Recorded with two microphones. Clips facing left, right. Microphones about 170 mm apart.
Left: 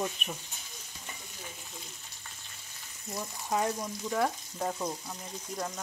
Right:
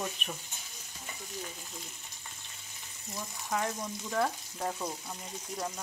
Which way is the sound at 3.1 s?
20° left (ahead or behind).